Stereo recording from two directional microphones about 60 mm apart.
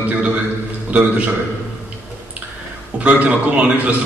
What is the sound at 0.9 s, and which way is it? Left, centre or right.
Speech, right.